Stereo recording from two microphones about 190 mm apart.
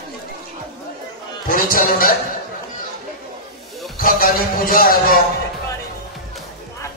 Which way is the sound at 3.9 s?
50° left (ahead or behind).